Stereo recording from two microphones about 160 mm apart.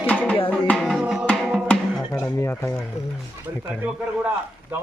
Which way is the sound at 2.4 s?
15° left (ahead or behind).